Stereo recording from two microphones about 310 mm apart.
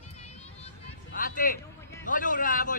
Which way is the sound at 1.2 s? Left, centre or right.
Left.